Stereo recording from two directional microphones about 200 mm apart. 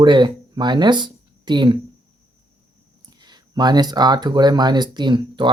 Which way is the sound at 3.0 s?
20° right (ahead or behind).